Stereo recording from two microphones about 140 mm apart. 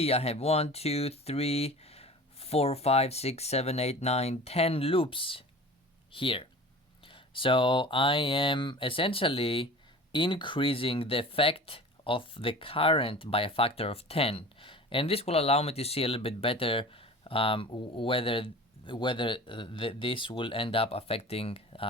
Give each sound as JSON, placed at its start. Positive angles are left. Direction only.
{"t": 0.0, "sound": "speech", "side_deg": 45}